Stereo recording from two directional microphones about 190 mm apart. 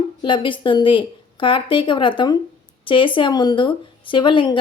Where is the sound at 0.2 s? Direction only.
25° left (ahead or behind).